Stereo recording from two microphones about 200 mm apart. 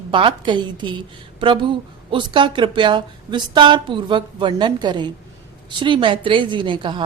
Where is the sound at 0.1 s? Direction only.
25° right (ahead or behind).